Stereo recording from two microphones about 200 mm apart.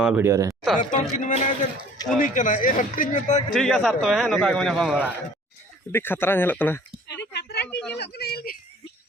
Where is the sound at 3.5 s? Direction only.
Centre (ahead or behind).